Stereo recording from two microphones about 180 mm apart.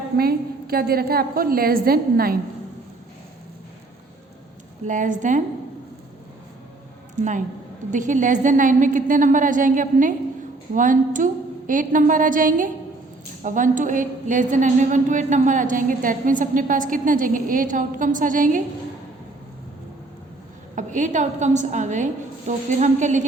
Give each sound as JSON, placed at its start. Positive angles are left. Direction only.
{"t": 0.2, "sound": "a woman's voice", "side_deg": -55}
{"t": 4.9, "sound": "a woman's voice", "side_deg": -45}
{"t": 7.2, "sound": "a woman's voice", "side_deg": -45}
{"t": 20.7, "sound": "a woman's voice", "side_deg": -45}